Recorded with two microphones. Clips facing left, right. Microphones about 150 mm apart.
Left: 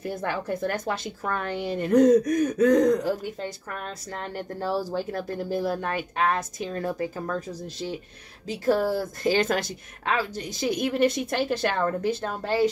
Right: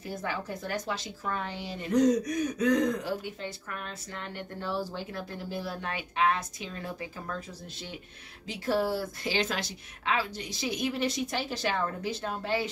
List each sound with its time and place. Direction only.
0.0 s a woman's voice: 55° left (ahead or behind)
9.2 s a woman's voice: 50° left (ahead or behind)